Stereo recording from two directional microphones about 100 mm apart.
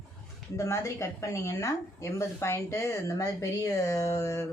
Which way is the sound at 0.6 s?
30° left (ahead or behind).